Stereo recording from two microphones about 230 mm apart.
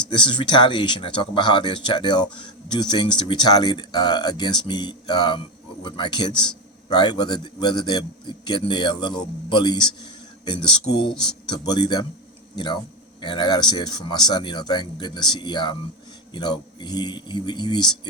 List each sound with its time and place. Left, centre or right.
0.1 s speech: left